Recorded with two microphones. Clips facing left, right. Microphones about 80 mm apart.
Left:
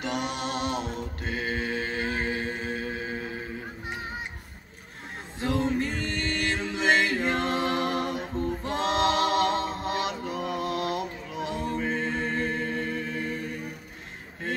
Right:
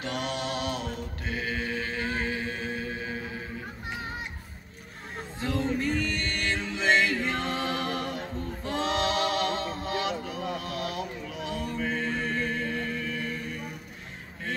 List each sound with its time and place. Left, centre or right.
0.0 s mantra: centre
1.2 s music: left
5.8 s music: left
8.7 s a sound: left